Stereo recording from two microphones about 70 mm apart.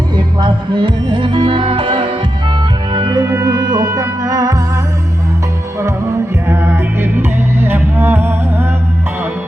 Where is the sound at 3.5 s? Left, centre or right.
Right.